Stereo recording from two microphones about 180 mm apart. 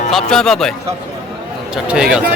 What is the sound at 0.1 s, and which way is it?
Speech, centre (ahead or behind).